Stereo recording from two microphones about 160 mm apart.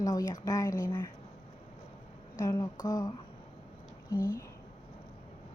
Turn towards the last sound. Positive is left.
turn(degrees=20)  # may be behind; listen again after turning